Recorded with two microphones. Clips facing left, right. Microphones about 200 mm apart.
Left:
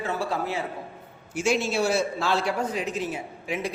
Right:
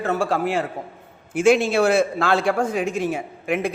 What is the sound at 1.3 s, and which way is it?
A man's voice, 55° right (ahead or behind).